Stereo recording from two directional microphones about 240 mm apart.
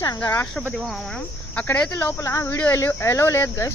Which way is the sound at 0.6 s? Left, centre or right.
Centre.